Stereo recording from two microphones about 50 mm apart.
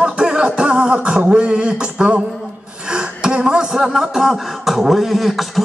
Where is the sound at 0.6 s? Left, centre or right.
Centre.